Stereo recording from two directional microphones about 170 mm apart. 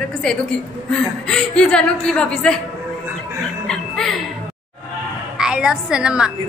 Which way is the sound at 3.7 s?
5° left (ahead or behind).